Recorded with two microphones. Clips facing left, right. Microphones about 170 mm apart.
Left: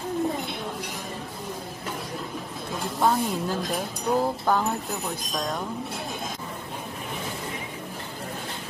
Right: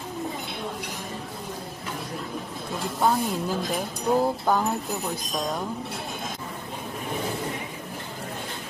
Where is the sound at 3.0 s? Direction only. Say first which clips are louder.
Even; centre (ahead or behind).